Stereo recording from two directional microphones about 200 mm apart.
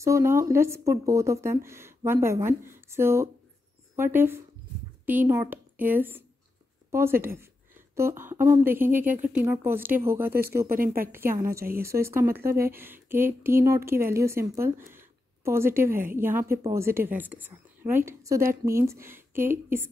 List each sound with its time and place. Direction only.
0.0 s a woman's voice: 15° right (ahead or behind)
10.7 s a woman's voice: 45° right (ahead or behind)
11.1 s a woman's voice: 10° right (ahead or behind)